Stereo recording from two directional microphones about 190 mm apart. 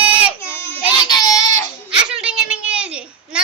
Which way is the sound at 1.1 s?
20° left (ahead or behind).